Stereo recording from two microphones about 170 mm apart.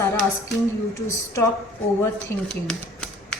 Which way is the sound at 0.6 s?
20° left (ahead or behind).